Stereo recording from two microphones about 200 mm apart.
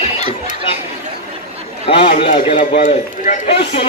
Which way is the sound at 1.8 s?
30° left (ahead or behind).